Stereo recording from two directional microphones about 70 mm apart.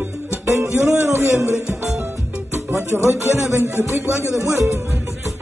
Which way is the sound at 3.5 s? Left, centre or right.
Right.